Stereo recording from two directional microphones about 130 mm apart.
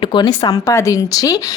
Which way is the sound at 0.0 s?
40° left (ahead or behind).